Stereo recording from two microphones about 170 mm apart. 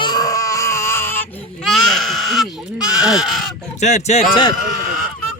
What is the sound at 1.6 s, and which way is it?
Sheep, centre (ahead or behind).